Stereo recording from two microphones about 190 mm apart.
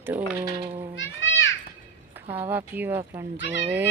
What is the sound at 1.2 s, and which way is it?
Children playing, 75° left (ahead or behind).